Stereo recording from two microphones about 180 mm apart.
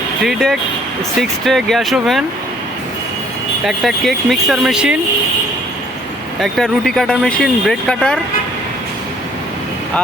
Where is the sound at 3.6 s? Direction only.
Centre (ahead or behind).